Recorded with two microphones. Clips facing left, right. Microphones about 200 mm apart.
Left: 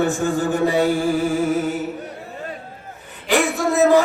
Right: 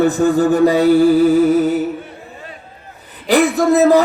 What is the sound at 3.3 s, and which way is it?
Music, 35° right (ahead or behind).